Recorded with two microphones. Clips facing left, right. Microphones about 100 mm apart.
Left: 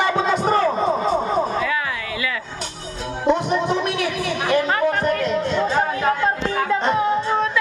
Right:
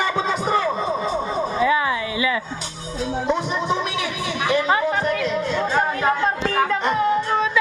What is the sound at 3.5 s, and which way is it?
Speech, 45° left (ahead or behind).